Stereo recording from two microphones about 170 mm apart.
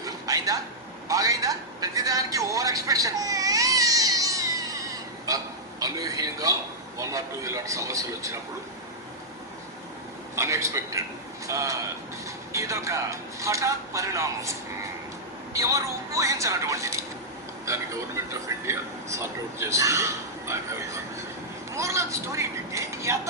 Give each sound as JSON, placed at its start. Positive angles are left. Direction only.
{"t": 0.0, "sound": "a sound", "side_deg": -20}
{"t": 7.0, "sound": "a man's voice", "side_deg": -20}
{"t": 10.3, "sound": "a man's voice", "side_deg": -15}
{"t": 15.5, "sound": "a man's voice", "side_deg": -20}